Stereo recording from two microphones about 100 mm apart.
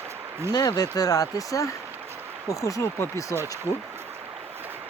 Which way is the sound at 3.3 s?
25° right (ahead or behind).